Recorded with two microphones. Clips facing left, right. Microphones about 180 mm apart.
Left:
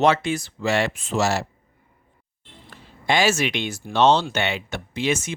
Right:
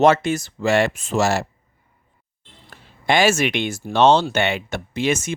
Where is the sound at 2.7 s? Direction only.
55° right (ahead or behind).